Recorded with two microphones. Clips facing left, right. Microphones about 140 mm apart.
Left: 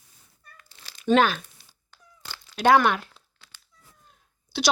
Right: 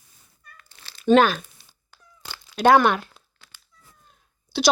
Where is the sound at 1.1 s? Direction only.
45° right (ahead or behind).